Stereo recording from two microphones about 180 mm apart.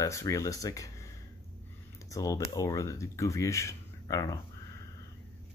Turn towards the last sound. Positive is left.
turn(degrees=20)  # may be behind; listen again after turning